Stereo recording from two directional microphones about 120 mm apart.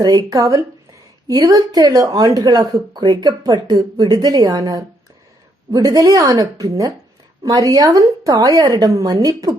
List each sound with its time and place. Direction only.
0.0 s speech: 30° right (ahead or behind)